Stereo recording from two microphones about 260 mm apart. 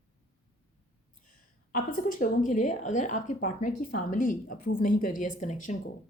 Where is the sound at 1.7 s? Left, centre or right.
Left.